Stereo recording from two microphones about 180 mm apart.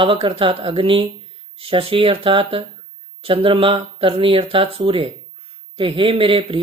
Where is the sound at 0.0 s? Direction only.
30° right (ahead or behind).